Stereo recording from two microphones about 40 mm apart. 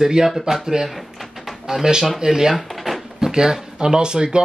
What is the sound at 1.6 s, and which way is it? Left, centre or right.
Speech, centre.